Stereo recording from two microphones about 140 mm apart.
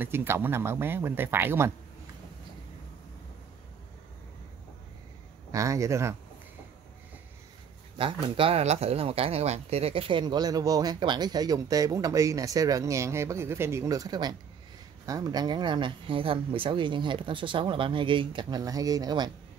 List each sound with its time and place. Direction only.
0.0 s speech: 15° right (ahead or behind)
5.5 s speech: 25° right (ahead or behind)
8.0 s speech: 40° right (ahead or behind)